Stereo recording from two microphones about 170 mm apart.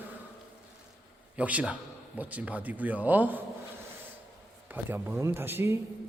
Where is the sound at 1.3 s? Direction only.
10° right (ahead or behind).